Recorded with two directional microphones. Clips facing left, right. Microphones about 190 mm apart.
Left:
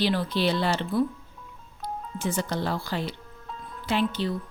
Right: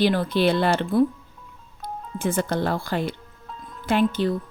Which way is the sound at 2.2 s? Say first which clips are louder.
Right 5 dB; 55° right (ahead or behind).